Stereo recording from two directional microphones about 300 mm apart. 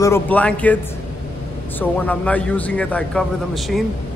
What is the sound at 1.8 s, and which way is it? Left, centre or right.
A man's voice, centre.